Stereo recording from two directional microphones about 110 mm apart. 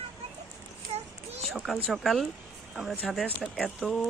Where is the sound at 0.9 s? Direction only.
80° right.